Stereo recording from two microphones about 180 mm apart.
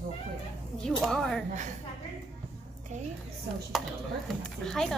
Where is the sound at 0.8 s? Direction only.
Centre (ahead or behind).